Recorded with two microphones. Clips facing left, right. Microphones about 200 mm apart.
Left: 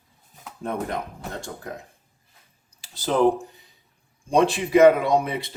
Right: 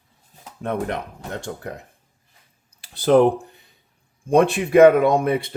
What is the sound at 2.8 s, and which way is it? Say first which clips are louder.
Speech: right 7 dB; 60° right (ahead or behind).